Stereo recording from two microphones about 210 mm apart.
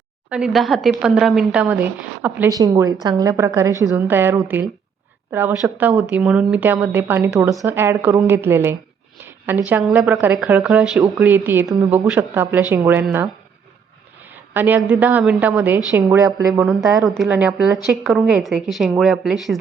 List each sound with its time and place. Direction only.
0.3 s speech: 5° right (ahead or behind)
14.3 s speech: 10° right (ahead or behind)
16.6 s speech: centre (ahead or behind)